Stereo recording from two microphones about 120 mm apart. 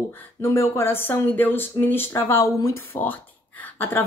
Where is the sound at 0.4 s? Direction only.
20° left (ahead or behind).